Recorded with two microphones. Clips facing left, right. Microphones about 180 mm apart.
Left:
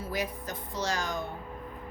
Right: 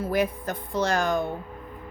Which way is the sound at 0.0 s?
55° right (ahead or behind).